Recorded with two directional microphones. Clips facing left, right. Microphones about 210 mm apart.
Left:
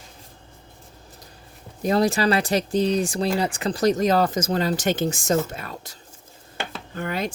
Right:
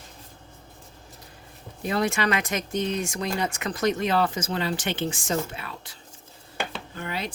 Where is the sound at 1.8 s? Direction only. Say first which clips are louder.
Left 5 dB; 40° left (ahead or behind).